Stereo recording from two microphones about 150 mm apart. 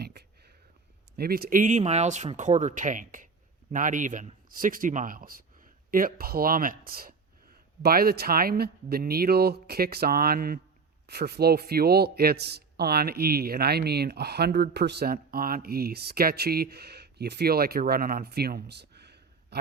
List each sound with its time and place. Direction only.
0.0 s a sound: 90° right
1.1 s speech: 90° right
7.8 s speech: 90° right